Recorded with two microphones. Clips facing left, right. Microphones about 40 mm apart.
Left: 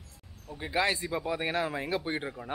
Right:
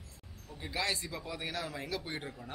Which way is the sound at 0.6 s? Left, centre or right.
Left.